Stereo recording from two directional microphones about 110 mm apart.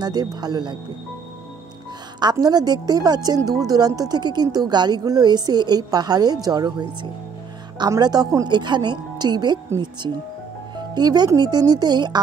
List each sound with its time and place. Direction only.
0.0 s a woman's voice: 40° right (ahead or behind)
2.1 s a woman's voice: 40° right (ahead or behind)
8.5 s speech: 45° right (ahead or behind)
11.0 s a woman's voice: 40° right (ahead or behind)